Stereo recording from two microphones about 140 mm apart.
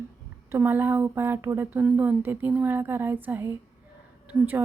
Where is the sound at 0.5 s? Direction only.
15° right (ahead or behind).